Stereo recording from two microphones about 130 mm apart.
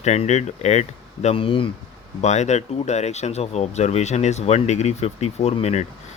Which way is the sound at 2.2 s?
60° left (ahead or behind).